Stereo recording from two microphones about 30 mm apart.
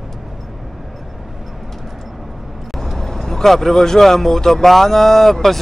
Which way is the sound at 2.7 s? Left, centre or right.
Centre.